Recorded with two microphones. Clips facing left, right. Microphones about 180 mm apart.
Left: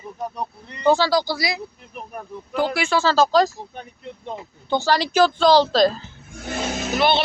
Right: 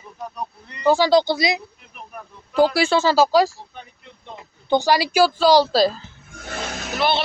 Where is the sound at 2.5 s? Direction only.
35° right (ahead or behind).